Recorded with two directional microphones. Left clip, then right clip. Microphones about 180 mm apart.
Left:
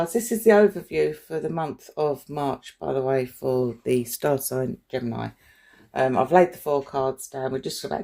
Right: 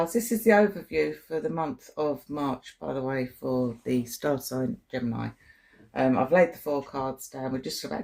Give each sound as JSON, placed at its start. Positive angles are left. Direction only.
{"t": 0.3, "sound": "speech", "side_deg": 45}